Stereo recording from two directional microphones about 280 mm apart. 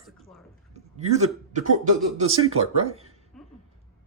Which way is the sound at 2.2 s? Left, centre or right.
Right.